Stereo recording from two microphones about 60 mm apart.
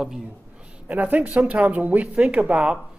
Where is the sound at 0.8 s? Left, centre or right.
Right.